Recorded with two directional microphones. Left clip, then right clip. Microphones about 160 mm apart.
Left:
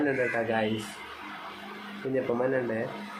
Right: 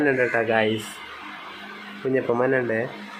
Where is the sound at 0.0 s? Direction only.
30° right (ahead or behind).